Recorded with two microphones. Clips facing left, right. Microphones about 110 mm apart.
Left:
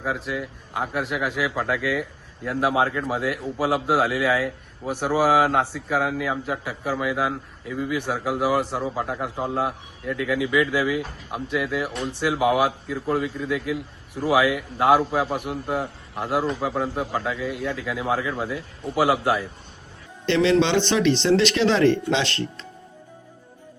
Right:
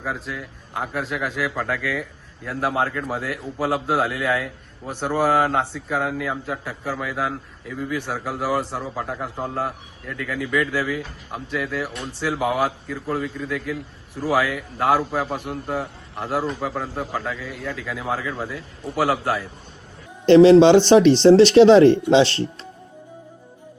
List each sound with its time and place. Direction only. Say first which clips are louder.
0.0 s a man's voice: left 2 dB; 5° left (ahead or behind)
8.8 s a man's voice: left 2 dB; 5° left (ahead or behind)
14.3 s a man's voice: left 2 dB; 15° left (ahead or behind)
16.4 s a man's voice: left 1 dB; centre (ahead or behind)
20.2 s speech: right 9 dB; 35° right (ahead or behind)